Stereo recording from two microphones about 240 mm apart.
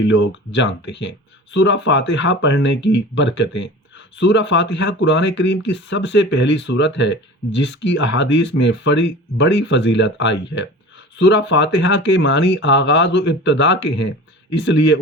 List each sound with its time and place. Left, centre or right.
0.1 s speech: left